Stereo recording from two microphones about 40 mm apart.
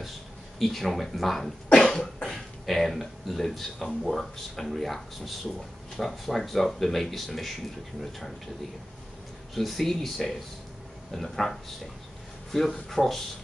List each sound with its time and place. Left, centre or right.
0.6 s speech: centre
1.9 s cough: left
2.6 s speech: centre
9.6 s speech: centre